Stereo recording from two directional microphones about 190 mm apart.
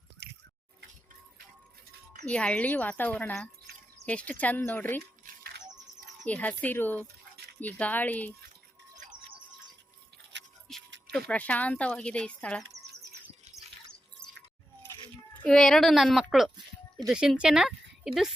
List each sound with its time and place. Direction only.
0.2 s a sound: 60° right (ahead or behind)
2.2 s speech: 5° left (ahead or behind)
5.2 s music: 55° right (ahead or behind)
6.2 s speech: 10° left (ahead or behind)
10.7 s music: centre (ahead or behind)
11.3 s speech: 5° left (ahead or behind)
15.4 s a woman's voice: 5° left (ahead or behind)